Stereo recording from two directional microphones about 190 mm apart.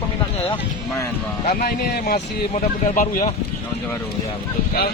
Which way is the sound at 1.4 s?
55° left (ahead or behind).